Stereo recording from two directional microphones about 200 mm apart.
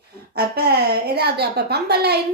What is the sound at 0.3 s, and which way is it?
A woman's voice, 55° right (ahead or behind).